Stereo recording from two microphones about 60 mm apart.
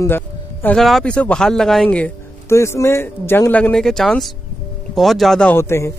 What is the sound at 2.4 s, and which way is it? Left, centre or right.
Speech, left.